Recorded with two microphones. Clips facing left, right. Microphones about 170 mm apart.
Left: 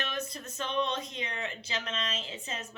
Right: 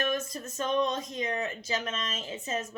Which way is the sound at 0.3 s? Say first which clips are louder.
Right 1 dB; 40° right (ahead or behind).